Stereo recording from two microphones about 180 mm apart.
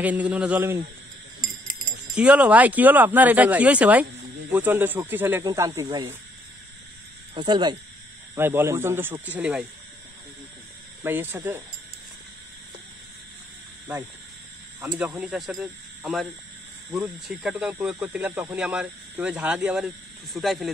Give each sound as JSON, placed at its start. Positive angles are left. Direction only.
{"t": 0.0, "sound": "speech", "side_deg": -10}
{"t": 1.4, "sound": "a sound", "side_deg": -50}
{"t": 2.1, "sound": "speech", "side_deg": -10}
{"t": 7.3, "sound": "speech", "side_deg": -25}
{"t": 8.4, "sound": "speech", "side_deg": -10}
{"t": 11.0, "sound": "speech", "side_deg": -10}
{"t": 15.0, "sound": "speech", "side_deg": -10}